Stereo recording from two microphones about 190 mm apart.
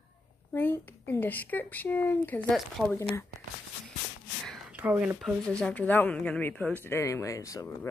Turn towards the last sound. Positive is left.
turn(degrees=15)  # may be behind; listen again after turning